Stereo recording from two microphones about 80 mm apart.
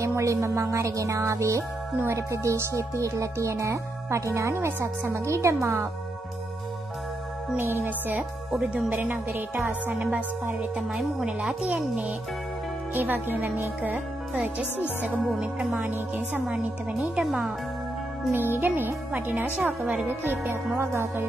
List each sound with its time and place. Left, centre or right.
0.0 s speech: right
7.8 s speech: centre
11.0 s speech: centre
15.3 s speech: centre
15.8 s speech: right
17.1 s speech: centre
18.3 s speech: right